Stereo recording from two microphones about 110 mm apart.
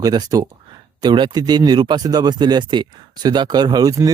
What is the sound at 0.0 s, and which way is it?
Speech, 35° right (ahead or behind).